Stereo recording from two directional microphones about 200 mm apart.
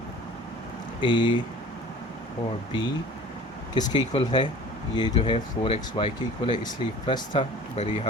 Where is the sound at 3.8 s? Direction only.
25° left (ahead or behind).